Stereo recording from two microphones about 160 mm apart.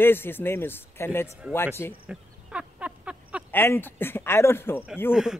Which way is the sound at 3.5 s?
15° left (ahead or behind).